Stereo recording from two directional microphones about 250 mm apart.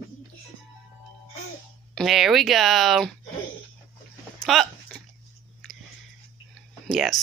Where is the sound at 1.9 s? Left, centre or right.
Centre.